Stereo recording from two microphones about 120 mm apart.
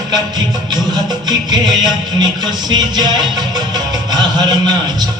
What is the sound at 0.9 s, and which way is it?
Music, 35° right (ahead or behind).